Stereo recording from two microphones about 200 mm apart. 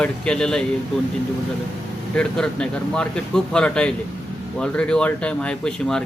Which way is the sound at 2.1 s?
5° left (ahead or behind).